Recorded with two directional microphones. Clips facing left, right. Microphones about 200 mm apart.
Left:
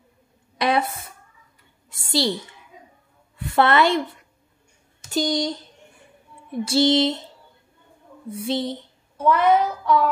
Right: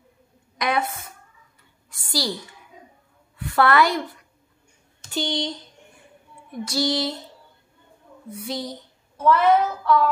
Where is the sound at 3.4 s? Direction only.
25° left (ahead or behind).